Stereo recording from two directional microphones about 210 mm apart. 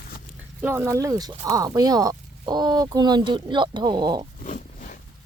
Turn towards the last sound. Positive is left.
turn(degrees=40)  # may be behind; listen again after turning